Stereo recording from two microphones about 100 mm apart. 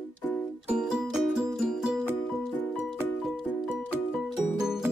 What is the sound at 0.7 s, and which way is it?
Music, 10° right (ahead or behind).